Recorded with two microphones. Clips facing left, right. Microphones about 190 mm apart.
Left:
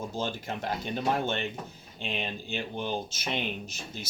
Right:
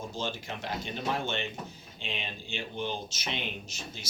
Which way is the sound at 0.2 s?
50° left (ahead or behind).